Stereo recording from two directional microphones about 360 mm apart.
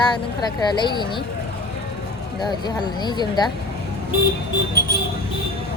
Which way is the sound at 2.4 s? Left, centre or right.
Centre.